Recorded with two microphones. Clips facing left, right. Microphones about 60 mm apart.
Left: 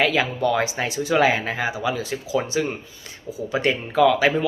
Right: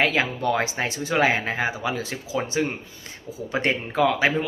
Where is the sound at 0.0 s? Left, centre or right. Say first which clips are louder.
Left 2 dB; right.